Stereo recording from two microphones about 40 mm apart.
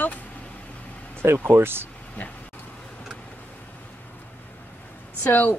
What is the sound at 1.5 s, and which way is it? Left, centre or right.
Speech, right.